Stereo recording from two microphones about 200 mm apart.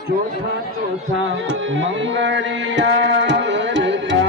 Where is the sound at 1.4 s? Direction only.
70° right (ahead or behind).